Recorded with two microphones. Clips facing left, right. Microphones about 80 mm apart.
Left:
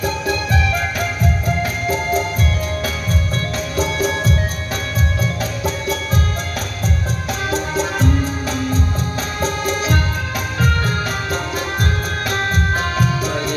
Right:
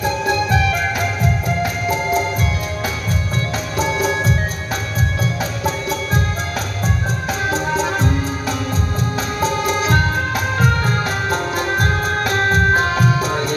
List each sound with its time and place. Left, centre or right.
11.8 s music: right